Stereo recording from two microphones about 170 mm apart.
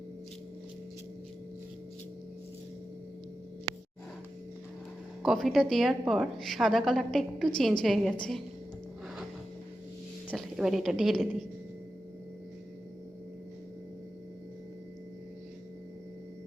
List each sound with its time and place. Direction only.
5.2 s a woman's voice: centre (ahead or behind)
10.2 s a woman's voice: centre (ahead or behind)